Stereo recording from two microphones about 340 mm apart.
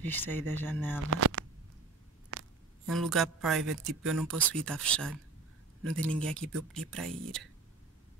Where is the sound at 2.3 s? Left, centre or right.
Right.